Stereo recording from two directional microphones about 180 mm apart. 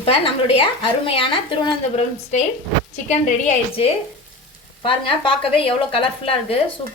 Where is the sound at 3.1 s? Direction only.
40° left (ahead or behind).